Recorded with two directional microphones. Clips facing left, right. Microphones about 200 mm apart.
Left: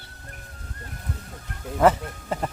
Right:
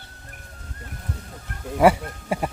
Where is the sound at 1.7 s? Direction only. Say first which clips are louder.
Right 2 dB; 10° right (ahead or behind).